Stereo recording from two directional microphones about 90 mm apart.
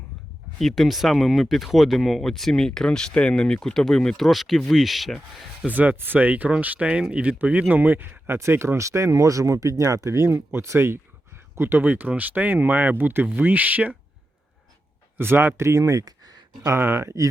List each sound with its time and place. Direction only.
0.6 s speech: centre (ahead or behind)
5.6 s speech: 20° right (ahead or behind)
15.2 s speech: 25° right (ahead or behind)